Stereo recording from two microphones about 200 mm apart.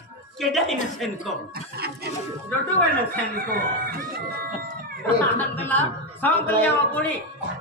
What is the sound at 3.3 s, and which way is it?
Speech, 50° right (ahead or behind).